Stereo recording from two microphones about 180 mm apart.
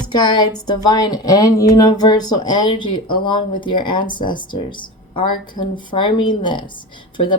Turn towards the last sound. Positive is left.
turn(degrees=25)  # may be behind; listen again after turning